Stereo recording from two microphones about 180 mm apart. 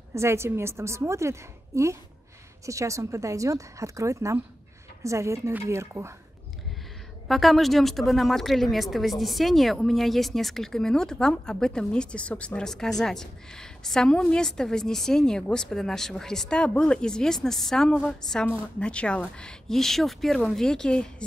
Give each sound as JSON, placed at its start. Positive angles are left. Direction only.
{"t": 0.1, "sound": "a woman's voice", "side_deg": -15}
{"t": 7.2, "sound": "speech", "side_deg": 0}